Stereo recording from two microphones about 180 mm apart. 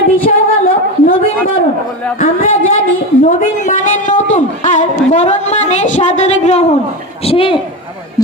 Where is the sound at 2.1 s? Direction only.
50° left (ahead or behind); by 7.6 s 30° left (ahead or behind).